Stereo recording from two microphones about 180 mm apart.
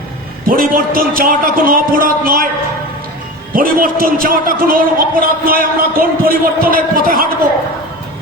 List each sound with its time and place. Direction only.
0.4 s a man's voice: 50° right (ahead or behind)
3.5 s a man's voice: 50° right (ahead or behind)